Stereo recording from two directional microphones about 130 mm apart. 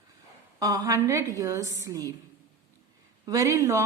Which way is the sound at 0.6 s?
30° right (ahead or behind).